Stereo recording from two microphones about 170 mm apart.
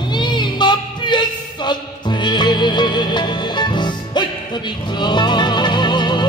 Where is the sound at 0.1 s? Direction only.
25° left (ahead or behind).